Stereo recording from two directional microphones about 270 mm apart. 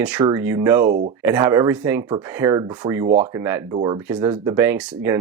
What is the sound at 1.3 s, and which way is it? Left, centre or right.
Speech, centre.